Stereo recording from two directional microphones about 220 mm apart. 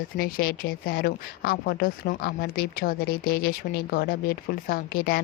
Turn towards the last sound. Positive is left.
turn(degrees=45)  # may be behind; listen again after turning